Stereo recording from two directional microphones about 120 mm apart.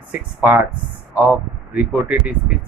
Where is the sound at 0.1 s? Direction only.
15° right (ahead or behind).